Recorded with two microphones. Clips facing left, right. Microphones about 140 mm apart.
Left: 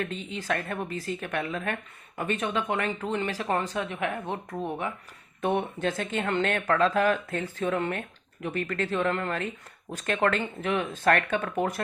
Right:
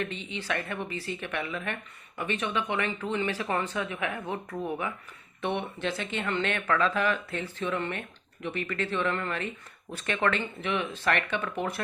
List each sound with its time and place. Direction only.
0.0 s a woman's voice: 45° left (ahead or behind)
5.4 s speech: 45° left (ahead or behind)